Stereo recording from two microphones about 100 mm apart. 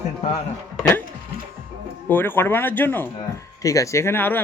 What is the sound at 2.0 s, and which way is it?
Speech, 20° left (ahead or behind).